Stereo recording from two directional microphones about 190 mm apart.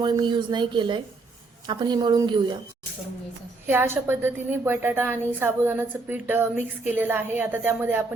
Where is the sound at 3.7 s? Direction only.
10° right (ahead or behind).